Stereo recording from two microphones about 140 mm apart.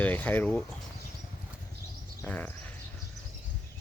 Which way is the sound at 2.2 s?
10° left (ahead or behind).